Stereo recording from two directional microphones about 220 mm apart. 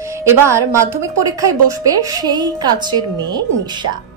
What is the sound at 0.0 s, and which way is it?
A woman's voice, 15° right (ahead or behind).